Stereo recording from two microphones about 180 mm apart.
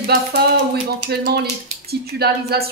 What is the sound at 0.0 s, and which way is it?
Speech, 60° right (ahead or behind).